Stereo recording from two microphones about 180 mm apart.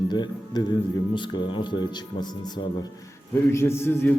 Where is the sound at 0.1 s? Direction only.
25° left (ahead or behind).